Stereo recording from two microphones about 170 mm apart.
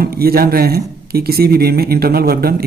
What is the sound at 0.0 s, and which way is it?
Speech, 65° right (ahead or behind).